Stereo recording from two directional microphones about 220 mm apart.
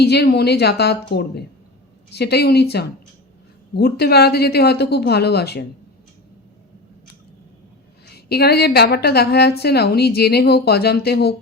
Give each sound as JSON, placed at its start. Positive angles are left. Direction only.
{"t": 0.0, "sound": "a woman's voice", "side_deg": 50}
{"t": 2.0, "sound": "a woman's voice", "side_deg": 50}
{"t": 8.0, "sound": "a woman's voice", "side_deg": 45}